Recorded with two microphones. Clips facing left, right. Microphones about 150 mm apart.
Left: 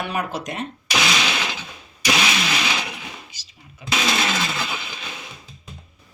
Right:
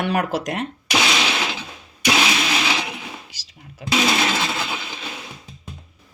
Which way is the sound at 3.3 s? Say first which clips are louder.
Right 4 dB; 80° right.